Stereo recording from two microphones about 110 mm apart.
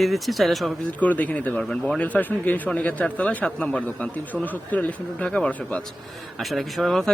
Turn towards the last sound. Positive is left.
turn(degrees=0)  # may be behind; listen again after turning